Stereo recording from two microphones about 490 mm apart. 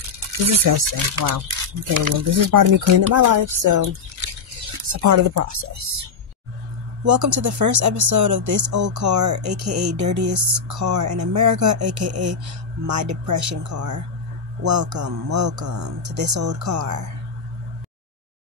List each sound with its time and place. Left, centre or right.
0.5 s speech: right
7.1 s speech: right